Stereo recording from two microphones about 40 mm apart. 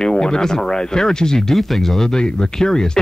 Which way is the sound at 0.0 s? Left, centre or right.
Centre.